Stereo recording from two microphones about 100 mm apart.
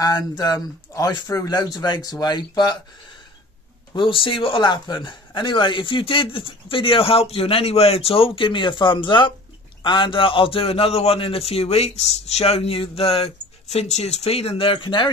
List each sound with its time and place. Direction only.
0.0 s speech: 40° left (ahead or behind)
3.9 s a man's voice: 60° left (ahead or behind)